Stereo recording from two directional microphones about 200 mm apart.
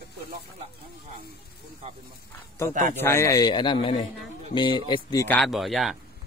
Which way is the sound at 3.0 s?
15° left (ahead or behind).